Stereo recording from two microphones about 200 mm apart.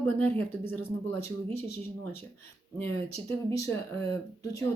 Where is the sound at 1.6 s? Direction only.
55° left (ahead or behind).